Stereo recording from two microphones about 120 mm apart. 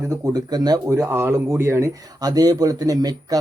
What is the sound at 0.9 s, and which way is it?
Speech, 20° right (ahead or behind).